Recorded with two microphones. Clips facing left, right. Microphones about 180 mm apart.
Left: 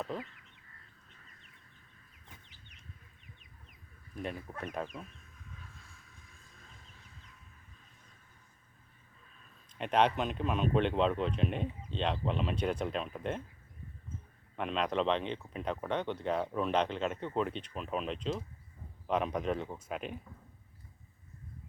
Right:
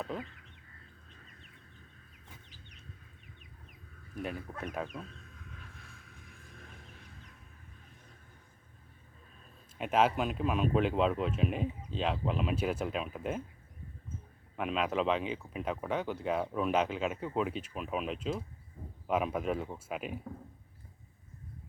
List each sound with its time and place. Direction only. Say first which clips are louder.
0.0 s speech: even; centre (ahead or behind)
4.5 s speech: right 1 dB; centre (ahead or behind)
5.0 s vehicle: right 4 dB; 70° right (ahead or behind)
9.7 s speech: even; 5° right (ahead or behind)
14.5 s speech: right 1 dB; 5° right (ahead or behind)